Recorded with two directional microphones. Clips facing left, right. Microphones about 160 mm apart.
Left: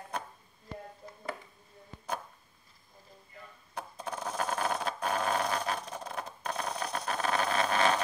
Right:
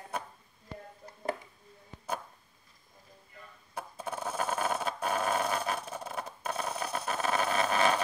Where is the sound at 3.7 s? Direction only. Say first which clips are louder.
Right 1 dB; 5° right (ahead or behind).